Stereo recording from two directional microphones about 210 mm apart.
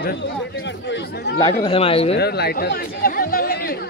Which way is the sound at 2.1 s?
50° left (ahead or behind).